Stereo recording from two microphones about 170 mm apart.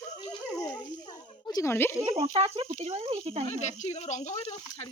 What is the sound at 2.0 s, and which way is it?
Speech, 35° right (ahead or behind).